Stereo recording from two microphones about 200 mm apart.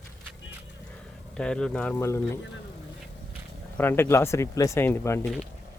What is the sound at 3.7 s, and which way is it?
Speech, 10° left (ahead or behind).